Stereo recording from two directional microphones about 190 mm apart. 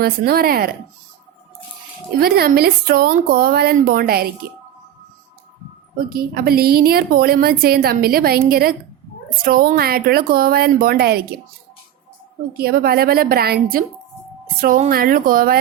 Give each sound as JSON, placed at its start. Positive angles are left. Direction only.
{"t": 0.0, "sound": "a woman's voice", "side_deg": -55}
{"t": 2.1, "sound": "a woman's voice", "side_deg": -55}
{"t": 6.1, "sound": "a woman's voice", "side_deg": -50}
{"t": 12.5, "sound": "a woman's voice", "side_deg": -55}